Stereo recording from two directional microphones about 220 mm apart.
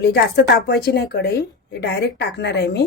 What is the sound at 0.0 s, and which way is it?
A woman's voice, 50° left (ahead or behind).